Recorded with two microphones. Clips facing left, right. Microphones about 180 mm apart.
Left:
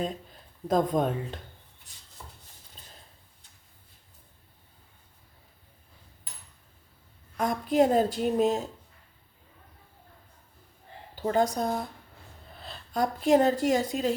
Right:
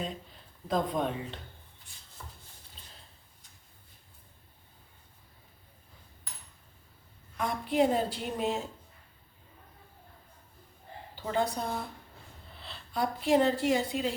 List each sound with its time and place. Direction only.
0.7 s a woman's voice: 45° left (ahead or behind)
7.3 s a woman's voice: 45° left (ahead or behind)
11.1 s speech: 45° left (ahead or behind)